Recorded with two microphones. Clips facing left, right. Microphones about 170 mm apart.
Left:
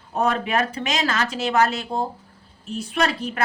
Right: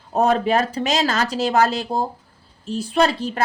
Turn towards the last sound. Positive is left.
turn(degrees=-30)  # may be behind; listen again after turning